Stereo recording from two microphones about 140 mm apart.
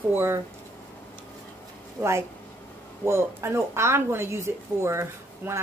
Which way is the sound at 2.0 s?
20° right (ahead or behind).